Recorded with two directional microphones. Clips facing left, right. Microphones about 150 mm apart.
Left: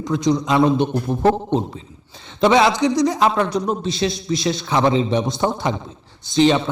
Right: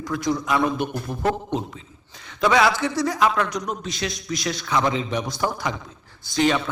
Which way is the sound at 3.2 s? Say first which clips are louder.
Left 4 dB; 30° left (ahead or behind).